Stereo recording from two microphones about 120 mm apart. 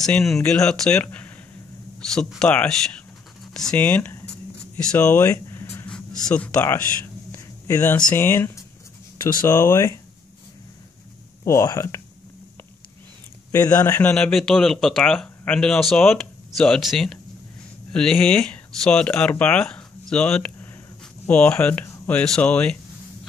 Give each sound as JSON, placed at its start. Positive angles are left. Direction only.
{"t": 0.0, "sound": "speech", "side_deg": 5}
{"t": 5.9, "sound": "speech", "side_deg": 5}
{"t": 7.3, "sound": "a sound", "side_deg": 25}
{"t": 8.0, "sound": "speech", "side_deg": 20}
{"t": 9.2, "sound": "speech", "side_deg": 30}
{"t": 11.4, "sound": "speech", "side_deg": 25}
{"t": 13.7, "sound": "speech", "side_deg": 20}
{"t": 14.1, "sound": "speech", "side_deg": 5}